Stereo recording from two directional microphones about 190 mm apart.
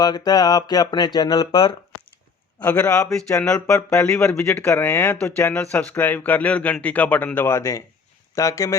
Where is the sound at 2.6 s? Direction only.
10° left (ahead or behind).